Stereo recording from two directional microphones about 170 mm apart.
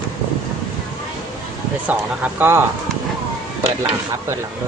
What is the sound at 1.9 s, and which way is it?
Speech, 10° right (ahead or behind).